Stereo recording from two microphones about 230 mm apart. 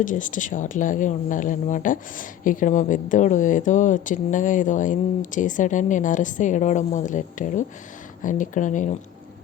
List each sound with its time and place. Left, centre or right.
0.0 s speech: left